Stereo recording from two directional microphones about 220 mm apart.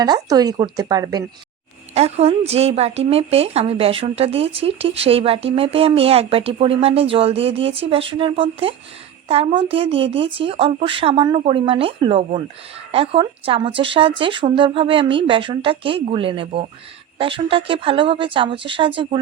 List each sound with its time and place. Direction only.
0.0 s speech: 15° right (ahead or behind)
2.0 s a woman's voice: 30° right (ahead or behind)